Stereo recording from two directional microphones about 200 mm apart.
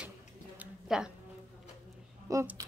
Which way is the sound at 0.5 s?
5° right (ahead or behind).